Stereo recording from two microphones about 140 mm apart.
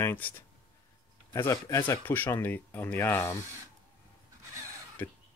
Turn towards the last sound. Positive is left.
turn(degrees=15)  # may be behind; listen again after turning